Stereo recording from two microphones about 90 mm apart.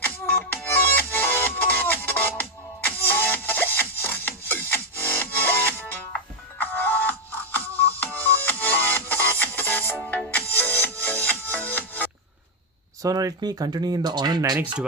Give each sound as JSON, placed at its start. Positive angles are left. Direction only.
{"t": 0.0, "sound": "music", "side_deg": 20}
{"t": 13.0, "sound": "speech", "side_deg": -40}